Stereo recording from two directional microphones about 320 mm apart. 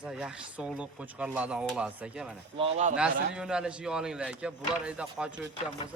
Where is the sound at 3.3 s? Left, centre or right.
Centre.